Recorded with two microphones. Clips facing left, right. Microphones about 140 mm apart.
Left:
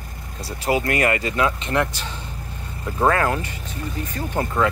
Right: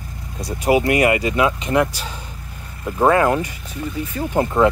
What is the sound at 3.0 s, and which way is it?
Speech, 20° right (ahead or behind).